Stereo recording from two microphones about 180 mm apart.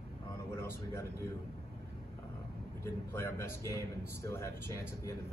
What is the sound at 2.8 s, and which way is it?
Speech, 15° left (ahead or behind).